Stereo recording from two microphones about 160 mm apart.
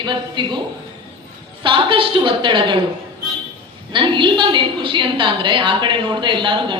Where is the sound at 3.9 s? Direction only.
30° right (ahead or behind).